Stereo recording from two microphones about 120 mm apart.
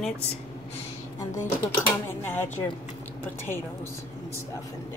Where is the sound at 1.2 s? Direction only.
25° left (ahead or behind).